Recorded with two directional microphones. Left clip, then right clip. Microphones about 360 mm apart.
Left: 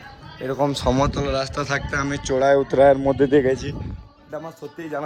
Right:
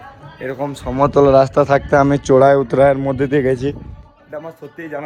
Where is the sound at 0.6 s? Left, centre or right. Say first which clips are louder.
Left 5 dB; left.